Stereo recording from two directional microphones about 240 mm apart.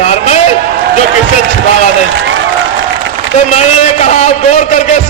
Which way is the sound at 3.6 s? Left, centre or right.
Left.